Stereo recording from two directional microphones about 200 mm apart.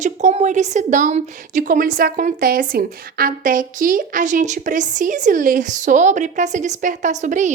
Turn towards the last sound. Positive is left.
turn(degrees=-40)  # may be behind; listen again after turning